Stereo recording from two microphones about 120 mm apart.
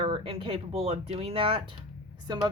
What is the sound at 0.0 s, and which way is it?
Speech, 50° right (ahead or behind).